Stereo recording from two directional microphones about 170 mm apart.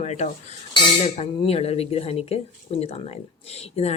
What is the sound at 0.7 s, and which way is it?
A woman's voice, 35° left (ahead or behind).